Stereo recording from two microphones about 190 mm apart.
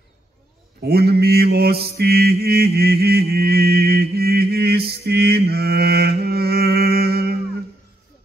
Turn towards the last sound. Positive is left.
turn(degrees=-55)  # may be behind; listen again after turning